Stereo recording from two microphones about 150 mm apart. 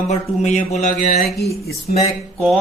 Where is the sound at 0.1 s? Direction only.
50° left (ahead or behind).